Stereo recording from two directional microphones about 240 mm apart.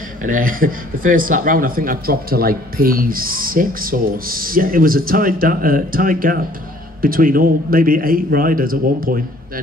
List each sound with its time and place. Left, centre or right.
0.2 s speech: right